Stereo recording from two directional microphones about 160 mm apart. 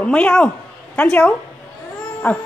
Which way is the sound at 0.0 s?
5° left (ahead or behind).